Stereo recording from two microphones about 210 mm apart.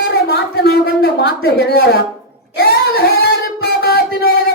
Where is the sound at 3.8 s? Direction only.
50° left (ahead or behind).